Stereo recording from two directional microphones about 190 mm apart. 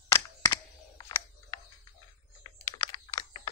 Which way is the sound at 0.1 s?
15° left (ahead or behind).